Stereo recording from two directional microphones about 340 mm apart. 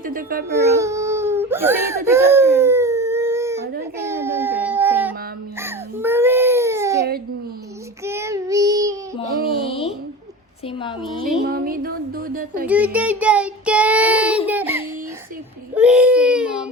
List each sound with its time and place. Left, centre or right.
0.0 s speech: right
0.6 s speech: centre
2.0 s whimper: centre
3.9 s baby cry: centre
8.0 s child singing: centre
9.6 s a sound: centre
11.0 s child singing: centre
11.4 s speech: right
12.6 s child singing: centre
15.7 s speech: centre